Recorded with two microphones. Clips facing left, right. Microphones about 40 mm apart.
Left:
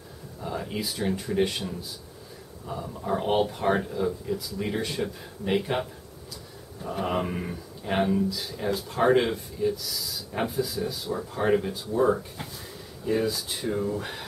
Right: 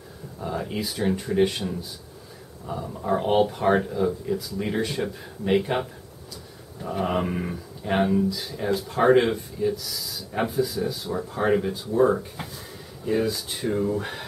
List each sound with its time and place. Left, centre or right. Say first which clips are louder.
0.5 s speech: right 2 dB; centre